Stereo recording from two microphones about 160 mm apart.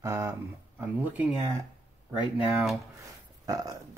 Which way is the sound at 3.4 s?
20° right (ahead or behind).